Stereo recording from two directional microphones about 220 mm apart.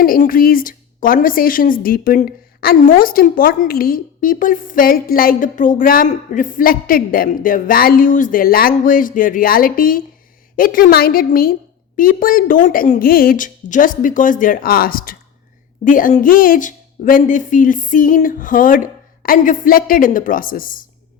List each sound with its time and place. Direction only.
0.0 s a woman's voice: 40° left (ahead or behind)